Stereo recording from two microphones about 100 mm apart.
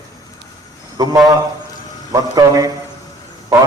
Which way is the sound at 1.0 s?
35° right (ahead or behind).